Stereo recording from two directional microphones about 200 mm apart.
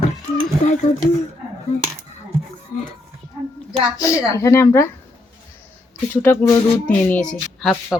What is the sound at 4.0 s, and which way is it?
Speech, 15° left (ahead or behind).